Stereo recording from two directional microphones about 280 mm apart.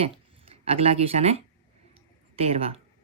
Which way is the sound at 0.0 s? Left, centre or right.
Right.